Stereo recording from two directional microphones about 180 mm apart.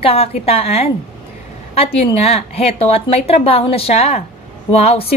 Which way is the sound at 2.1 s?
35° left (ahead or behind).